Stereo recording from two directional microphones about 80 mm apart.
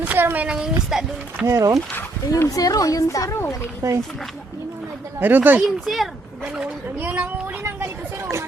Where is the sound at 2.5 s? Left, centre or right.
Left.